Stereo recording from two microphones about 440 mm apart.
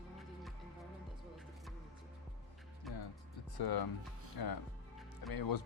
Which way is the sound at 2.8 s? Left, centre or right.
Centre.